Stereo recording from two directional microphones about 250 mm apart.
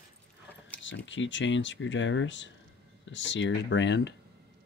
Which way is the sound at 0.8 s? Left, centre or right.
Left.